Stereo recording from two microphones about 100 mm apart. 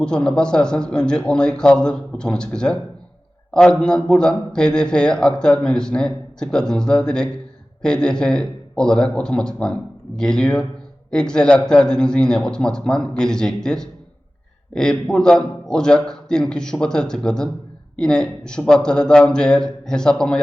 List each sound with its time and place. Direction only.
0.0 s a man's voice: 10° left (ahead or behind)